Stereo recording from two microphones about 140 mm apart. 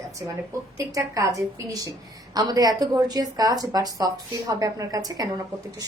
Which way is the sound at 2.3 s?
25° right (ahead or behind).